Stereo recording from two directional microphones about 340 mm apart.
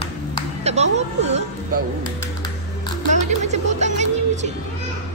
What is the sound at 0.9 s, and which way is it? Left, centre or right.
Speech, centre.